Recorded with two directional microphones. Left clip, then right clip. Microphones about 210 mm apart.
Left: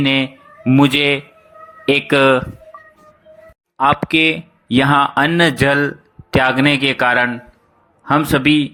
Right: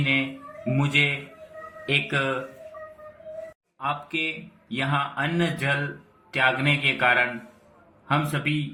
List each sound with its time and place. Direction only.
0.6 s speech: 50° left (ahead or behind)
3.8 s speech: 55° left (ahead or behind)